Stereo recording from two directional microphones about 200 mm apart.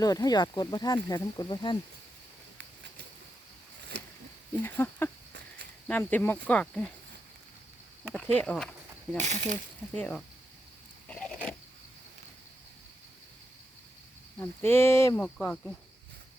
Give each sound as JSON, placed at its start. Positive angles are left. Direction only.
{"t": 0.0, "sound": "speech", "side_deg": 20}
{"t": 3.9, "sound": "a sound", "side_deg": -60}
{"t": 4.6, "sound": "speech", "side_deg": 10}
{"t": 8.0, "sound": "speech", "side_deg": 5}
{"t": 9.1, "sound": "speech", "side_deg": -35}
{"t": 9.9, "sound": "speech", "side_deg": 5}
{"t": 14.3, "sound": "speech", "side_deg": 10}